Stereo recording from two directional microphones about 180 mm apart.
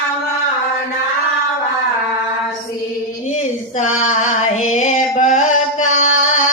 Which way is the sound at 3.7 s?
40° left (ahead or behind).